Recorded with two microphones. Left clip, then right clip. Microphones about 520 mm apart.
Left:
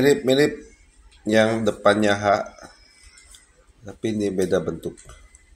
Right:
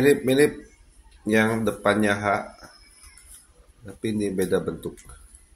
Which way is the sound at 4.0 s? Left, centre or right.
Right.